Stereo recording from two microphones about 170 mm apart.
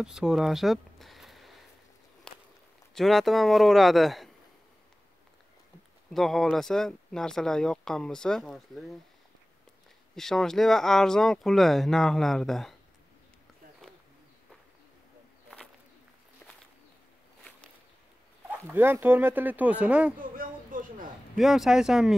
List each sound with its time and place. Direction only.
0.0 s speech: 5° right (ahead or behind)
2.9 s speech: centre (ahead or behind)
6.1 s speech: centre (ahead or behind)
10.1 s speech: centre (ahead or behind)
18.5 s speech: 15° right (ahead or behind)
20.2 s a sound: 55° right (ahead or behind)
21.4 s speech: centre (ahead or behind)